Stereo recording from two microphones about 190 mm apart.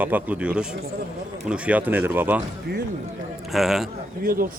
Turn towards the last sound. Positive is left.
turn(degrees=-50)  # may be behind; listen again after turning